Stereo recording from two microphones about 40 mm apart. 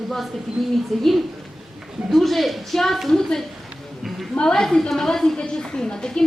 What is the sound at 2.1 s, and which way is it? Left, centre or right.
A woman's voice, centre.